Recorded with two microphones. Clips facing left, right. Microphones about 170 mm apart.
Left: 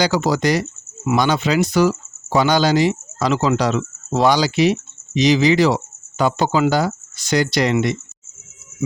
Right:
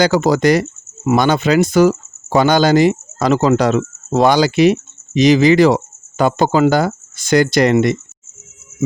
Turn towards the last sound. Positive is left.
turn(degrees=-50)  # may be behind; listen again after turning